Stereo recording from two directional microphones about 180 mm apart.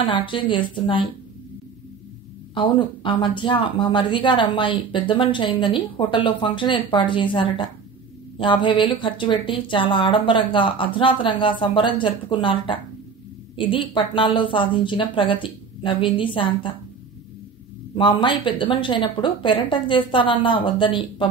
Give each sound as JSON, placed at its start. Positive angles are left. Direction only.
{"t": 0.1, "sound": "speech", "side_deg": 25}
{"t": 2.5, "sound": "speech", "side_deg": 25}
{"t": 17.9, "sound": "speech", "side_deg": 30}